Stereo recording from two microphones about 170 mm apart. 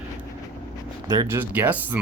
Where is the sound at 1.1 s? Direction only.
15° right (ahead or behind).